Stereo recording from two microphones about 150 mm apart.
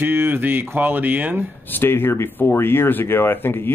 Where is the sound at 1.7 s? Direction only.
15° left (ahead or behind).